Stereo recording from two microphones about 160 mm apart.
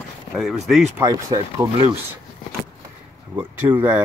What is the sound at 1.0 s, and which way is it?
Speech, 25° right (ahead or behind).